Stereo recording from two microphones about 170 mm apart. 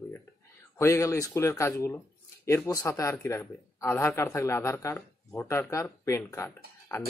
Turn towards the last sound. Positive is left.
turn(degrees=15)  # may be behind; listen again after turning